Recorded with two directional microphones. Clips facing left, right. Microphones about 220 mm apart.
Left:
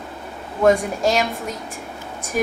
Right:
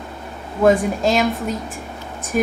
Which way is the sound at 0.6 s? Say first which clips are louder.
Right 1 dB; centre (ahead or behind).